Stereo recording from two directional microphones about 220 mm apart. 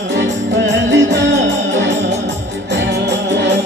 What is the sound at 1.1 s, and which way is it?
Music, 55° right (ahead or behind).